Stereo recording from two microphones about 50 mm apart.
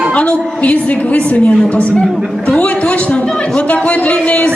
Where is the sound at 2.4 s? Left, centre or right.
Left.